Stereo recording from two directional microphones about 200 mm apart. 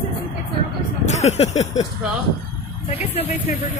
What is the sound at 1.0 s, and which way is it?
Speech, 35° left (ahead or behind).